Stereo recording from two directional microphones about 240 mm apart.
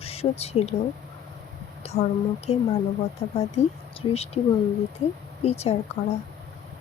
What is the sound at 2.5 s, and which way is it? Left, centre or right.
Speech, left.